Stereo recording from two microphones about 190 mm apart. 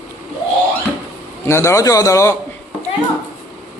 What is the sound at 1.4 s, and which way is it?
Speech, 15° left (ahead or behind).